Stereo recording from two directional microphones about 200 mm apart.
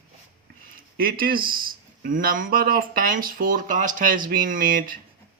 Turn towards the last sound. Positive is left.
turn(degrees=-45)  # may be behind; listen again after turning